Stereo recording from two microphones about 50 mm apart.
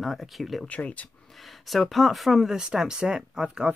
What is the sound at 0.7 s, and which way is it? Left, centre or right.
Speech, left.